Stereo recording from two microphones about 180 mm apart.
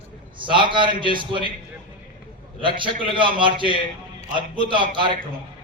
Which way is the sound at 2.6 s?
25° right (ahead or behind).